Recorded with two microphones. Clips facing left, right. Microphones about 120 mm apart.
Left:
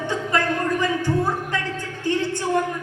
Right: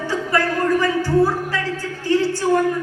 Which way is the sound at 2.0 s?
20° left (ahead or behind).